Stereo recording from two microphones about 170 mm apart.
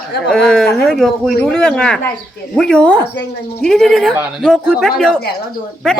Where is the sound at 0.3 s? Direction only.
5° left (ahead or behind).